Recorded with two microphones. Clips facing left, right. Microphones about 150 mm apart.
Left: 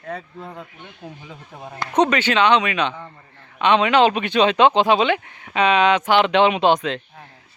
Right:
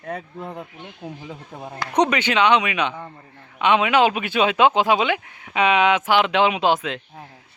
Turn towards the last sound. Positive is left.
turn(degrees=-5)  # may be behind; listen again after turning